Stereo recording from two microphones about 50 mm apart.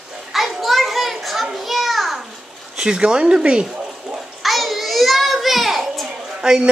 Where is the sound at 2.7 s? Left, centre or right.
Centre.